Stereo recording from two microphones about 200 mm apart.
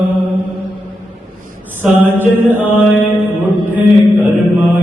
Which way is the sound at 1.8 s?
10° right (ahead or behind).